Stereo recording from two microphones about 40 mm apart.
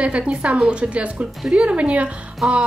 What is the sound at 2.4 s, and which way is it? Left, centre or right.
Music, centre.